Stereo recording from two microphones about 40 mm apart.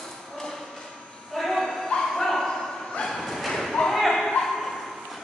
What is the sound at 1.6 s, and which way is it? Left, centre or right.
Bow-wow, centre.